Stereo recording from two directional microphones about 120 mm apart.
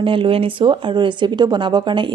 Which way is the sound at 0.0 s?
45° right (ahead or behind).